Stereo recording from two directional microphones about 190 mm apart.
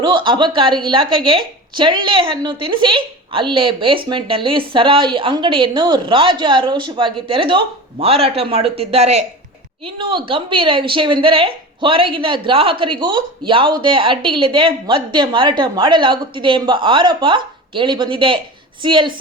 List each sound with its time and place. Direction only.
0.0 s a woman's voice: 25° right (ahead or behind)